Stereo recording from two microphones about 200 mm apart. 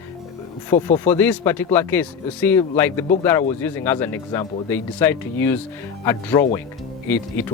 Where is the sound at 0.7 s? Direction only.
15° left (ahead or behind).